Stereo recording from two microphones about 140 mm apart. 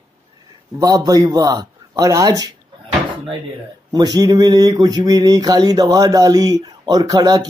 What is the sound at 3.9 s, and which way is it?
Speech, 30° right (ahead or behind).